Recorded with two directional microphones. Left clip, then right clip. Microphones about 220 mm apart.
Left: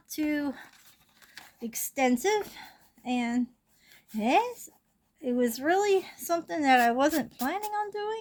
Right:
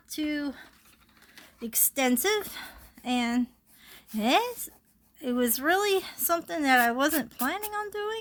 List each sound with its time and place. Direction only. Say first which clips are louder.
0.1 s speech: left 1 dB; centre (ahead or behind)
1.5 s a woman's voice: right 1 dB; 15° right (ahead or behind)